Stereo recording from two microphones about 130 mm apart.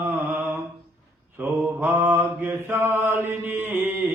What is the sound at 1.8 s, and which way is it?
Mantra, 15° right (ahead or behind).